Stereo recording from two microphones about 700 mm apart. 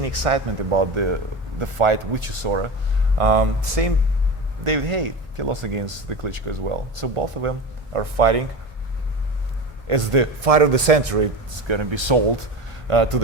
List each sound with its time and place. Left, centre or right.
0.0 s speech: right
9.8 s speech: right
11.7 s speech: right